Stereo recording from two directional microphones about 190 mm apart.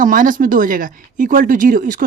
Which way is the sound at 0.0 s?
45° right (ahead or behind).